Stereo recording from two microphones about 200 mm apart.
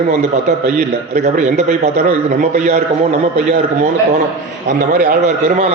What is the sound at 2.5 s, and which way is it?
Speech, 35° right (ahead or behind).